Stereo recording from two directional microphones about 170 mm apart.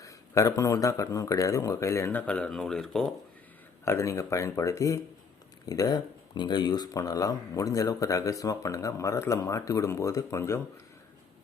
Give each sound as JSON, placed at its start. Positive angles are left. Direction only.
{"t": 0.0, "sound": "speech", "side_deg": 20}
{"t": 3.8, "sound": "speech", "side_deg": 15}